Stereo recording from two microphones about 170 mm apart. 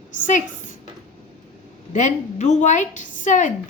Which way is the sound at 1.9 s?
45° left (ahead or behind).